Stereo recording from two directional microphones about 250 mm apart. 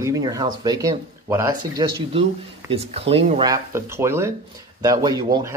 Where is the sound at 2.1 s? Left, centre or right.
Right.